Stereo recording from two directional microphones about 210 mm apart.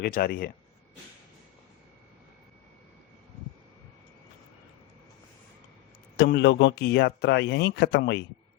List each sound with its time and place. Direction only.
0.0 s a man's voice: 45° left (ahead or behind)
6.1 s a man's voice: 50° left (ahead or behind)